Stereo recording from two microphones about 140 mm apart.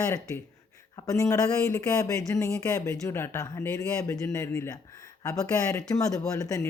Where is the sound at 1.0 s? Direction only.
25° left (ahead or behind).